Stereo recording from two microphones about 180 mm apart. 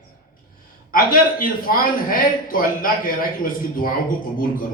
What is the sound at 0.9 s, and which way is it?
A man's voice, 50° left (ahead or behind).